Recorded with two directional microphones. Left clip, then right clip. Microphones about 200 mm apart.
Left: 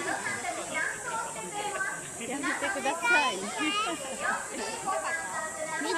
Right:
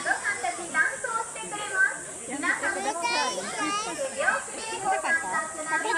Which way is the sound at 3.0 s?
25° right (ahead or behind).